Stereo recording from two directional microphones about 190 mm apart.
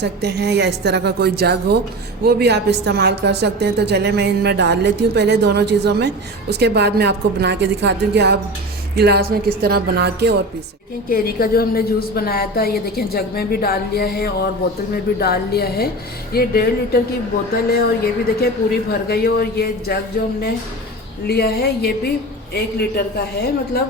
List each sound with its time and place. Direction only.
0.0 s a woman's voice: 60° right (ahead or behind)
11.1 s a woman's voice: 50° left (ahead or behind)
21.2 s a man's voice: 55° left (ahead or behind)